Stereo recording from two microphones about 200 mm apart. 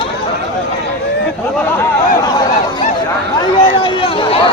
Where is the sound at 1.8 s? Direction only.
20° left (ahead or behind).